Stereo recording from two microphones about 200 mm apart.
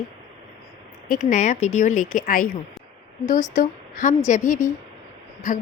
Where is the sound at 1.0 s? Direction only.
45° left (ahead or behind).